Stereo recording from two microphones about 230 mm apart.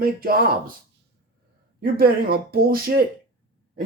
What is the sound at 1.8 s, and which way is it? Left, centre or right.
Speech, right.